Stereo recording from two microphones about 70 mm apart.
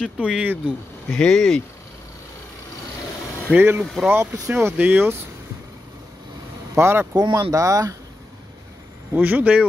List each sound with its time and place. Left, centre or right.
0.2 s speech: centre
1.1 s speech: centre
3.5 s speech: right
3.8 s speech: centre
4.1 s speech: right
6.7 s speech: right
7.2 s speech: right
9.1 s speech: right